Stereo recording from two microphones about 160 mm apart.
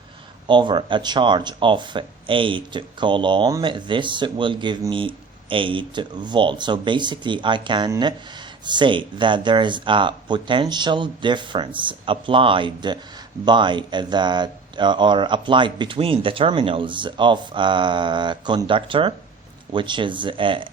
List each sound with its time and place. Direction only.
0.4 s speech: 30° right (ahead or behind)